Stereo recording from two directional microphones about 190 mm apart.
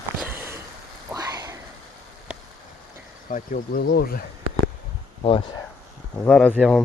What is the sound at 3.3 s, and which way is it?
Speech, 45° left (ahead or behind).